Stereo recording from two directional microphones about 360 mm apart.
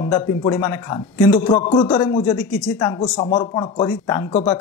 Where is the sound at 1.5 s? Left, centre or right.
Centre.